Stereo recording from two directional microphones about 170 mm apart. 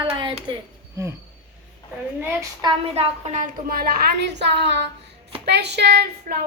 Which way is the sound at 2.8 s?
35° right (ahead or behind).